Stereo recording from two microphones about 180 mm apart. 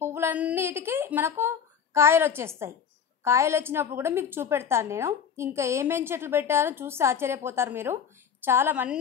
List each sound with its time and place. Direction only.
0.0 s a woman's voice: 15° right (ahead or behind)